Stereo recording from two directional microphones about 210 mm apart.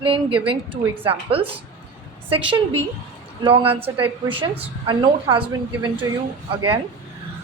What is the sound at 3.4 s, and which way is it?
A woman's voice, 25° right (ahead or behind).